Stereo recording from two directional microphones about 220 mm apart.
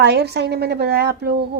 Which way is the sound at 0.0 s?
50° right (ahead or behind).